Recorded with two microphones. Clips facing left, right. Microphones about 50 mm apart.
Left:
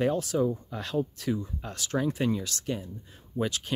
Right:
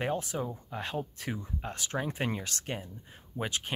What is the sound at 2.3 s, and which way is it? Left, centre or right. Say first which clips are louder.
Speech: left 5 dB; right.